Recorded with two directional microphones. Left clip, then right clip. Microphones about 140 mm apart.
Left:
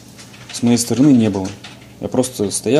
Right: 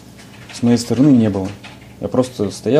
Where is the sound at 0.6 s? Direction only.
10° right (ahead or behind).